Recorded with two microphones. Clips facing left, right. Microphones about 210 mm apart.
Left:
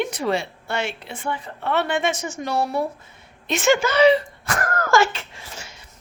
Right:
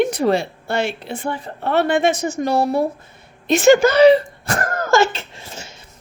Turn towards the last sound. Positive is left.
turn(degrees=-25)  # may be behind; listen again after turning